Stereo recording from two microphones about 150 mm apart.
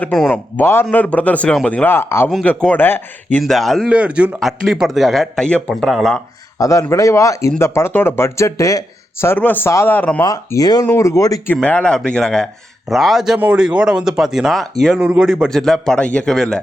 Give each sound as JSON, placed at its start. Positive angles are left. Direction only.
{"t": 0.0, "sound": "speech", "side_deg": 5}
{"t": 3.3, "sound": "speech", "side_deg": 0}
{"t": 6.6, "sound": "a man's voice", "side_deg": 20}
{"t": 10.2, "sound": "a man's voice", "side_deg": 20}
{"t": 11.5, "sound": "speech", "side_deg": 5}